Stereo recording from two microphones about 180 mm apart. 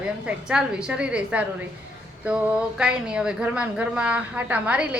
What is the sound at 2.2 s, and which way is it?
Child singing, 5° right (ahead or behind).